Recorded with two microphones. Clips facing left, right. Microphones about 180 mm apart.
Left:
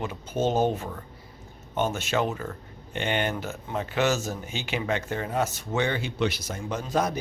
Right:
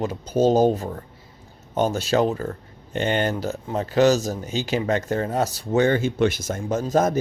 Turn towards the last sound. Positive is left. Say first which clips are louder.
# right 7 dB
turn(degrees=-45)  # may be behind; listen again after turning